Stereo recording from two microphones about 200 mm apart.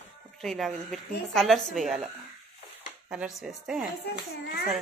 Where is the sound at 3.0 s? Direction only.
5° right (ahead or behind).